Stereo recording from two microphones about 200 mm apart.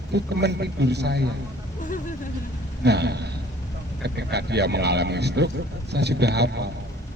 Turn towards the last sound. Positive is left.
turn(degrees=-55)  # may be behind; listen again after turning